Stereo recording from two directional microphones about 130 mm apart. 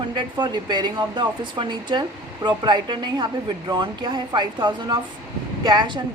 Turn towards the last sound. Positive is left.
turn(degrees=-35)  # may be behind; listen again after turning